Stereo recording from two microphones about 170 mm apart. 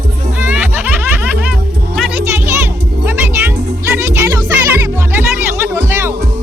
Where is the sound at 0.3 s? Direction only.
10° right (ahead or behind).